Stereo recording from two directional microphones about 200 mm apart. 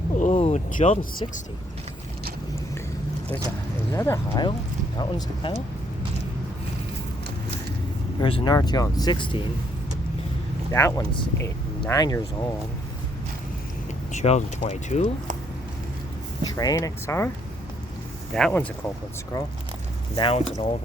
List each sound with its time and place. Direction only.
0.2 s a sound: 35° left (ahead or behind)
3.9 s speech: 15° left (ahead or behind)
8.2 s speech: 25° left (ahead or behind)
10.7 s speech: 15° left (ahead or behind)
14.1 s speech: 35° left (ahead or behind)
16.4 s speech: 20° left (ahead or behind)
18.3 s speech: 5° left (ahead or behind)
20.1 s speech: 25° left (ahead or behind)